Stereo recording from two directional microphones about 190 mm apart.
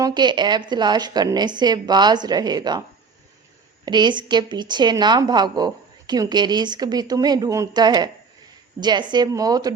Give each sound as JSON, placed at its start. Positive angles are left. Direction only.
{"t": 0.0, "sound": "a woman's voice", "side_deg": -20}
{"t": 3.8, "sound": "a woman's voice", "side_deg": -25}